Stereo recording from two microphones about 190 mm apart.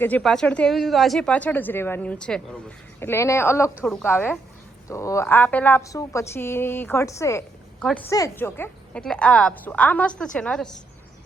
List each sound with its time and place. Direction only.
0.0 s a woman's voice: 5° left (ahead or behind)